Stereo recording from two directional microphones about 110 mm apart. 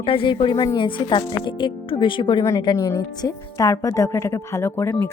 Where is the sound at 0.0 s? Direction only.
55° left (ahead or behind).